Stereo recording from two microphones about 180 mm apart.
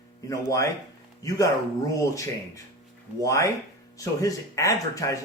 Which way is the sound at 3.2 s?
20° left (ahead or behind).